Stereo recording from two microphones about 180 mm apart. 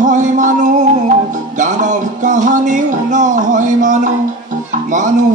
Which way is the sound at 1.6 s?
45° right (ahead or behind).